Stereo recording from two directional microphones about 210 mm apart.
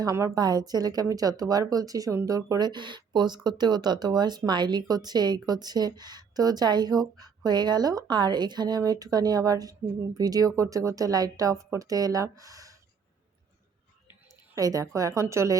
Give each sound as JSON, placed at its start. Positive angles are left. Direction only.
{"t": 0.0, "sound": "speech", "side_deg": -15}
{"t": 14.5, "sound": "speech", "side_deg": -15}